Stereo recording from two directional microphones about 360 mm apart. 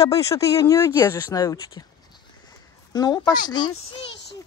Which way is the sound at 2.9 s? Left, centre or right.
Centre.